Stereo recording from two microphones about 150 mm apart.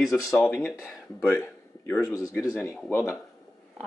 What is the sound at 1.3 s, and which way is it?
Speech, 20° left (ahead or behind).